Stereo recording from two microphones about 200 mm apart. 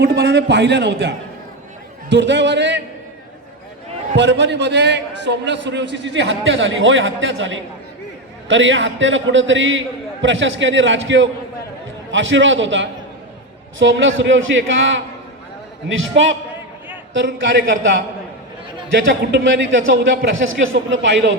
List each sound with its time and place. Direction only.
0.0 s a man's voice: 60° right (ahead or behind)
4.2 s a man's voice: 60° right (ahead or behind)